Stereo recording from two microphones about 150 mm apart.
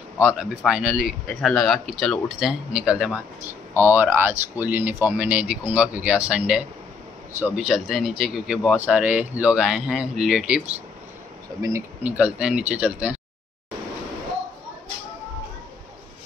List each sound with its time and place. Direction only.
0.2 s speech: 10° right (ahead or behind)
11.5 s speech: 25° right (ahead or behind)
12.0 s speech: 10° right (ahead or behind)